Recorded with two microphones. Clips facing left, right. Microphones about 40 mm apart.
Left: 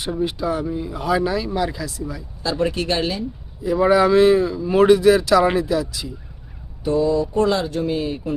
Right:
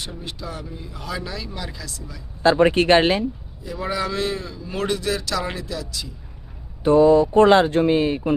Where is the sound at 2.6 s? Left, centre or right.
Right.